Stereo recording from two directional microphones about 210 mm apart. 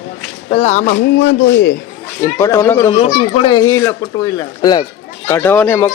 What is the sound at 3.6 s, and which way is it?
A man's voice, 15° left (ahead or behind).